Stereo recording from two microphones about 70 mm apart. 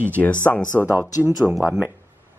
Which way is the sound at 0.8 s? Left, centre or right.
Centre.